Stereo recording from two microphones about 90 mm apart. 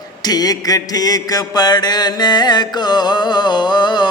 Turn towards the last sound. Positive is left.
turn(degrees=55)  # may be behind; listen again after turning